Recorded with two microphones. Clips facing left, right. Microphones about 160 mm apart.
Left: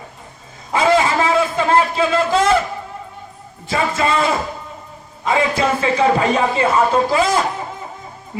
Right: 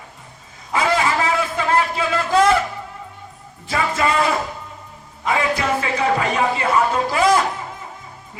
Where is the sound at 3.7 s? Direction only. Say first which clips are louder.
Left 2 dB; 25° left (ahead or behind).